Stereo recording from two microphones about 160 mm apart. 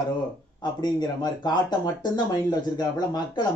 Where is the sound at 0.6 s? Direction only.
25° left (ahead or behind).